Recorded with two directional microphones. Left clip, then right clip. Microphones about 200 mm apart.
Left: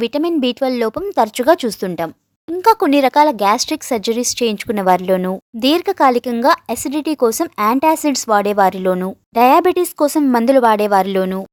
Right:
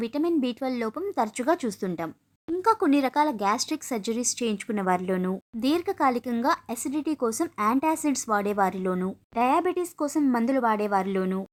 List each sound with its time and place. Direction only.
0.0 s speech: 30° left (ahead or behind)